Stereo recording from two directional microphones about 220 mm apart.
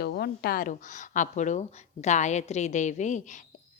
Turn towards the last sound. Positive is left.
turn(degrees=30)  # may be behind; listen again after turning